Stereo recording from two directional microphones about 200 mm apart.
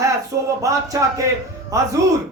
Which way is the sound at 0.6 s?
15° right (ahead or behind).